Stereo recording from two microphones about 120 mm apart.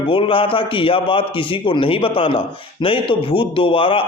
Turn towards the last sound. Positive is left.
turn(degrees=45)  # may be behind; listen again after turning